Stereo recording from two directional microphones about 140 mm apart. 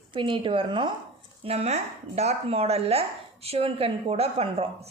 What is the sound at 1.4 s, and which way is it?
Speech, 45° right (ahead or behind).